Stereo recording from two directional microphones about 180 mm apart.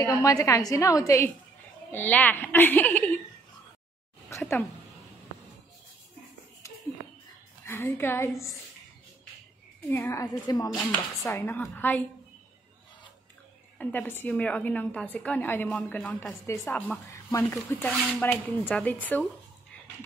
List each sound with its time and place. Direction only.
0.0 s speech: 20° left (ahead or behind)
4.4 s speech: 10° left (ahead or behind)
7.6 s speech: 15° left (ahead or behind)
9.8 s a woman's voice: 15° left (ahead or behind)
13.7 s speech: 10° left (ahead or behind)